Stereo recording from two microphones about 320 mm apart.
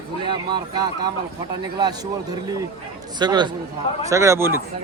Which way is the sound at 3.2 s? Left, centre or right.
Centre.